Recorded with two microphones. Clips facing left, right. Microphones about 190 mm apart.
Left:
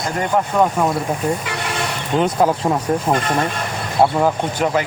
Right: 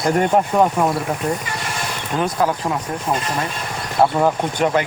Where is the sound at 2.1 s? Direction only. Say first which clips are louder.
Left 4 dB; 25° left (ahead or behind).